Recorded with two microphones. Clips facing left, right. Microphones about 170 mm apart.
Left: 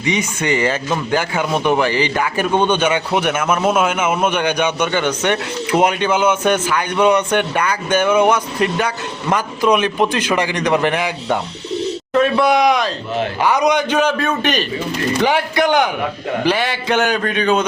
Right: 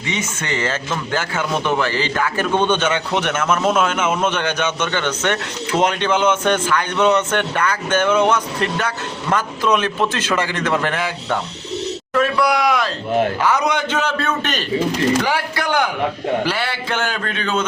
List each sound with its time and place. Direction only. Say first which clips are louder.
0.0 s a man's voice: left 6 dB; 15° left (ahead or behind)